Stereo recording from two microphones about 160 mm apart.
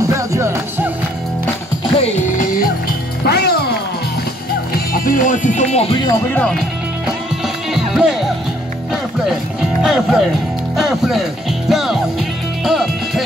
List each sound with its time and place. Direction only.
0.0 s music: 20° right (ahead or behind)
2.0 s music: 50° left (ahead or behind)
3.3 s music: 85° left
4.7 s music: 60° left (ahead or behind); by 5.9 s 40° left (ahead or behind)
7.7 s music: centre (ahead or behind)
9.8 s speech: 5° right (ahead or behind)
11.7 s music: centre (ahead or behind)